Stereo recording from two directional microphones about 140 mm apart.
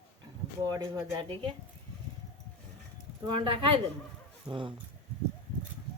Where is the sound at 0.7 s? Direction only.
30° right (ahead or behind).